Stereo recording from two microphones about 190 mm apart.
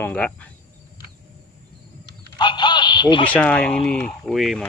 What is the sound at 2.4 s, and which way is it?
Radio, 25° left (ahead or behind).